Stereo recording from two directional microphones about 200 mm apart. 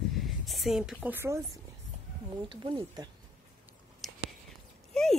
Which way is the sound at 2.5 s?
25° right (ahead or behind).